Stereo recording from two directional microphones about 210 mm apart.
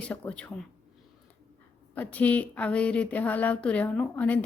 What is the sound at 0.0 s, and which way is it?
Speech, 5° left (ahead or behind).